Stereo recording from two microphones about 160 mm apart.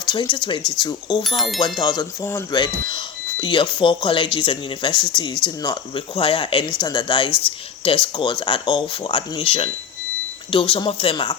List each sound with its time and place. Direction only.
0.0 s speech: 25° left (ahead or behind)
1.4 s speech: centre (ahead or behind)
2.0 s speech: 20° left (ahead or behind)